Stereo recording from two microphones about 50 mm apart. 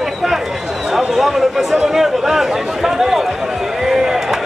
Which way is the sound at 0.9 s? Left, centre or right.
Centre.